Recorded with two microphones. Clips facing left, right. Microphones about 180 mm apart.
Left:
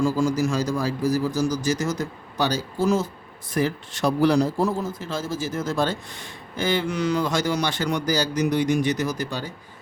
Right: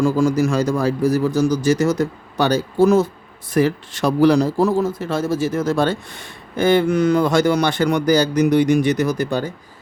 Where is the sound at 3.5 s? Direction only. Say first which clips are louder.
Right 7 dB; 75° right (ahead or behind); by 9.5 s 55° right (ahead or behind).